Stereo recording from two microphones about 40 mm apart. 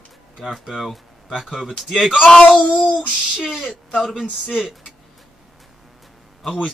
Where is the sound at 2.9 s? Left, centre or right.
Centre.